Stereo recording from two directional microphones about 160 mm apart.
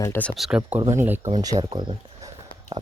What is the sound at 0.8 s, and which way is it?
Speech, 15° right (ahead or behind).